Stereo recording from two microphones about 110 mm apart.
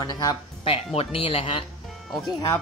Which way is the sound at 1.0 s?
55° left (ahead or behind).